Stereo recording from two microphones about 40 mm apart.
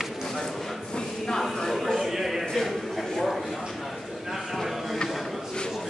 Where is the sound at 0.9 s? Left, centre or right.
Centre.